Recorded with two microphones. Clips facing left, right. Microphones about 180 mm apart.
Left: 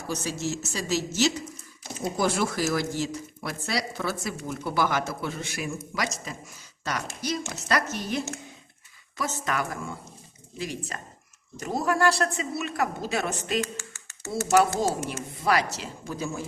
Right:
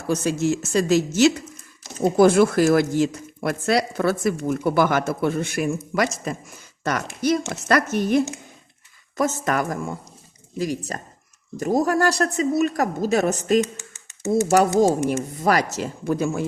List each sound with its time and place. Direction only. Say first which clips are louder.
0.1 s a woman's voice: right 9 dB; 55° right (ahead or behind)
13.7 s a sound: left 1 dB; 15° right (ahead or behind)
15.1 s speech: right 5 dB; 45° right (ahead or behind); by 16.5 s 60° right (ahead or behind)